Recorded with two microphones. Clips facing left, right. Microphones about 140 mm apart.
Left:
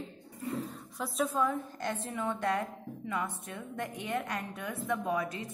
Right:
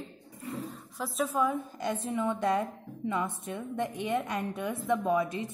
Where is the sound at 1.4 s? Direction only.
15° right (ahead or behind).